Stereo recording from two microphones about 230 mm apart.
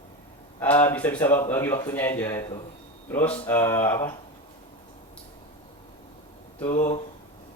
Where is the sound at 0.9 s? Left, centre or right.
Centre.